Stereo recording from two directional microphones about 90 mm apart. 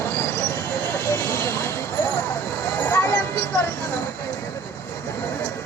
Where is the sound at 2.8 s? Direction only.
30° left (ahead or behind).